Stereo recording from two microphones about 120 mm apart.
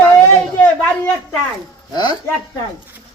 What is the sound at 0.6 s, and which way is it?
Speech, 10° left (ahead or behind).